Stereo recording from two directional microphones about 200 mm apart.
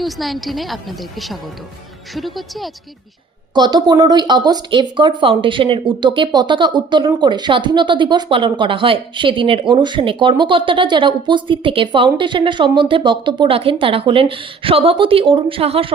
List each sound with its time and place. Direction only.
0.0 s a woman's voice: centre (ahead or behind)
3.5 s speech: 20° right (ahead or behind)